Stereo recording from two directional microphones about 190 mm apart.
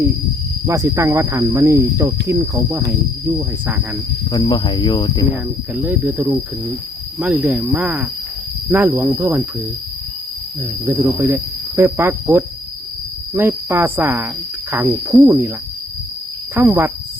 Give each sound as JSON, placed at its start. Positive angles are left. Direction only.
{"t": 0.7, "sound": "speech", "side_deg": -15}
{"t": 4.3, "sound": "speech", "side_deg": 25}
{"t": 5.3, "sound": "speech", "side_deg": -10}
{"t": 10.8, "sound": "speech", "side_deg": -10}
{"t": 16.6, "sound": "speech", "side_deg": -10}